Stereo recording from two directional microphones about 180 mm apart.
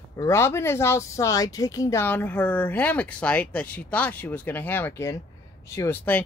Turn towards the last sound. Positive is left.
turn(degrees=10)  # may be behind; listen again after turning